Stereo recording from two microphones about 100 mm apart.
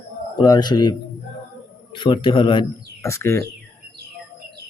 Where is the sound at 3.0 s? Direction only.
25° left (ahead or behind).